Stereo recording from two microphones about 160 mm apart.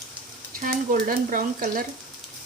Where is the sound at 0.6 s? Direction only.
60° right (ahead or behind).